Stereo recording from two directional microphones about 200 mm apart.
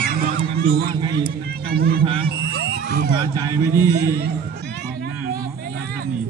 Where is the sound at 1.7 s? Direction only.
50° right (ahead or behind).